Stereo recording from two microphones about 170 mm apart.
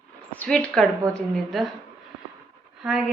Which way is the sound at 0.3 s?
5° left (ahead or behind).